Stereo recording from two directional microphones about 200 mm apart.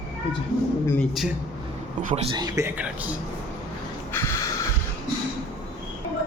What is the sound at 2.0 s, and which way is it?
Speech, 40° right (ahead or behind).